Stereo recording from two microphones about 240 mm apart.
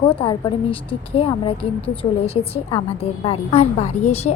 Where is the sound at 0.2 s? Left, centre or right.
Left.